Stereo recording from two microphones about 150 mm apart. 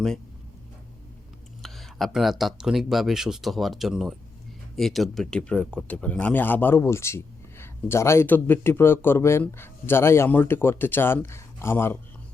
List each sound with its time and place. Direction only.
1.6 s speech: centre (ahead or behind)